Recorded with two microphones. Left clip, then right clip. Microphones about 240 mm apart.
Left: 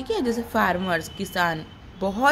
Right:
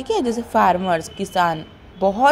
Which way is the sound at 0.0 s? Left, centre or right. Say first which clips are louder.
Right 4 dB; centre.